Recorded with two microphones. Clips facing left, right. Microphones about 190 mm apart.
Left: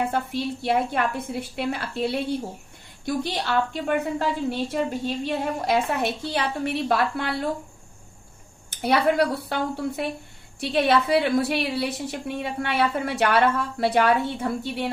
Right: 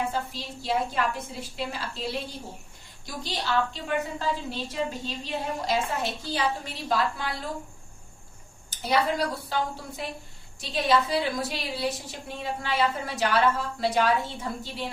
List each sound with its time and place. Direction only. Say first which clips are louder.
0.0 s a woman's voice: left 5 dB; 60° left (ahead or behind)
8.8 s a woman's voice: left 5 dB; 60° left (ahead or behind)